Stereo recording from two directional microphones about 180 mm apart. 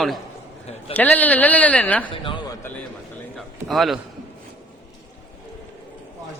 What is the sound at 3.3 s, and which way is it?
Speech, centre (ahead or behind).